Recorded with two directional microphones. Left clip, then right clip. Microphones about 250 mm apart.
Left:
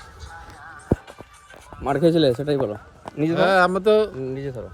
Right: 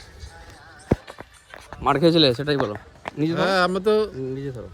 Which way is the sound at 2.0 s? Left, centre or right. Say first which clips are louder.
Even; right.